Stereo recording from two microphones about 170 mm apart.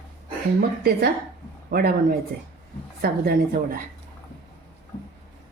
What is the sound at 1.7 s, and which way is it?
Speech, 60° right (ahead or behind).